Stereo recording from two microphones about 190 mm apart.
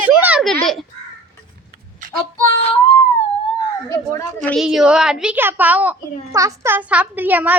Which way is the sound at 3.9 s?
15° left (ahead or behind).